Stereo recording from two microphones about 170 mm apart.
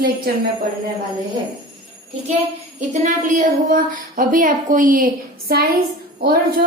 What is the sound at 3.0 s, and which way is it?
A woman's voice, 50° right (ahead or behind).